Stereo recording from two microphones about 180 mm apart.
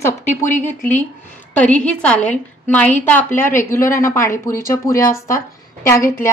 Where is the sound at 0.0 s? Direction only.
10° left (ahead or behind).